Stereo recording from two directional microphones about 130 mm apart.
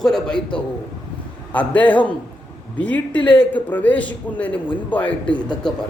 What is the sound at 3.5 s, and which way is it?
A man's voice, 15° left (ahead or behind).